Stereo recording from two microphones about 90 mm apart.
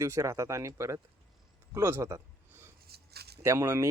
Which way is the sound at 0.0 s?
35° right (ahead or behind).